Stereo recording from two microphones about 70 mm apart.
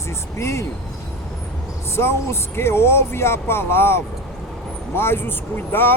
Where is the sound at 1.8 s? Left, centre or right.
Left.